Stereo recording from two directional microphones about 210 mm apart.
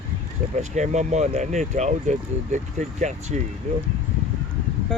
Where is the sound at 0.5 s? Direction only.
35° right (ahead or behind).